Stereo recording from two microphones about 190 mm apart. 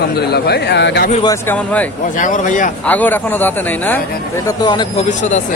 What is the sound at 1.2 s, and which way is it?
Speech, 15° left (ahead or behind).